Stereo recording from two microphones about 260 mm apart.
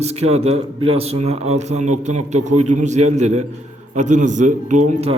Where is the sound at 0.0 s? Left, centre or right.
Right.